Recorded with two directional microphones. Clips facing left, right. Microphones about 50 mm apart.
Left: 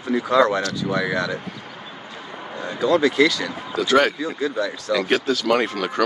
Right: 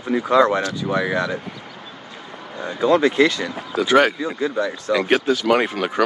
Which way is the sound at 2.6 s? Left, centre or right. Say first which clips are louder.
Right 2 dB; right.